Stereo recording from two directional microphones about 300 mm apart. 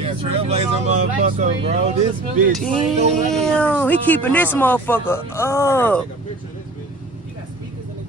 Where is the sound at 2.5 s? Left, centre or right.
Centre.